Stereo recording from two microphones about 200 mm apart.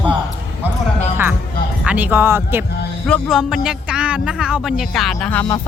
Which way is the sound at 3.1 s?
Centre (ahead or behind).